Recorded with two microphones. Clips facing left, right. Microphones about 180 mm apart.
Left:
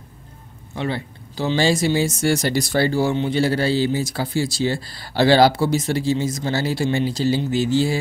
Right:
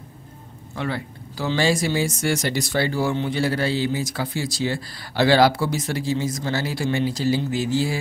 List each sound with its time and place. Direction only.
0.7 s speech: 25° left (ahead or behind)